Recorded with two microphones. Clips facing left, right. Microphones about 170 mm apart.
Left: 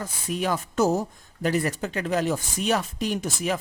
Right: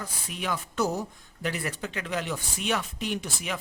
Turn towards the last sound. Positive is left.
turn(degrees=40)  # may be behind; listen again after turning